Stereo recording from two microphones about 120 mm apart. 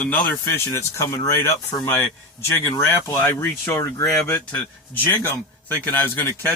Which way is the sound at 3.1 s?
20° left (ahead or behind).